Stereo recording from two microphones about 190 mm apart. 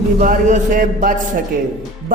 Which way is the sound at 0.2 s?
45° right (ahead or behind).